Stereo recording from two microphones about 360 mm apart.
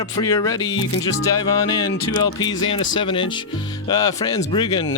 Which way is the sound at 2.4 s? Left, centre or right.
Centre.